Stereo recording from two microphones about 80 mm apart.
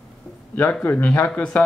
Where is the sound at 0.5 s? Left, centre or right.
Left.